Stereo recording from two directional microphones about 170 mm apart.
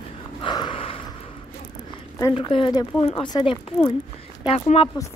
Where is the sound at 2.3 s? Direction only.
30° left (ahead or behind).